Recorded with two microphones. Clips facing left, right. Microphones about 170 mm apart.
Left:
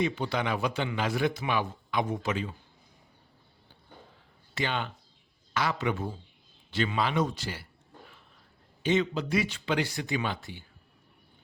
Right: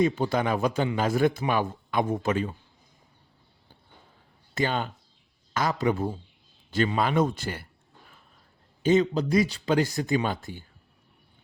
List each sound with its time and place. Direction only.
0.0 s speech: 45° right (ahead or behind)
4.5 s speech: 40° right (ahead or behind)
8.8 s speech: 40° right (ahead or behind)